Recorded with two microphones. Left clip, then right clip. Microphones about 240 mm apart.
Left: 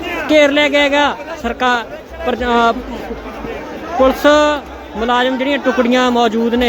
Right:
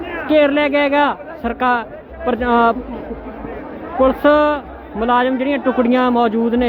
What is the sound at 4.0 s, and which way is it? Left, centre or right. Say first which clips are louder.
A man's voice: left 2 dB; centre.